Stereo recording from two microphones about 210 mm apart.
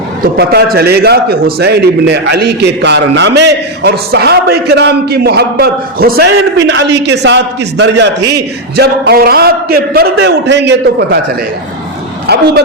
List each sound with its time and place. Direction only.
0.3 s a man's voice: 50° right (ahead or behind)
12.3 s a man's voice: 50° right (ahead or behind)